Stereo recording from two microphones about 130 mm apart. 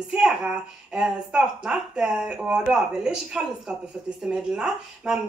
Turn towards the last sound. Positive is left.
turn(degrees=-5)  # may be behind; listen again after turning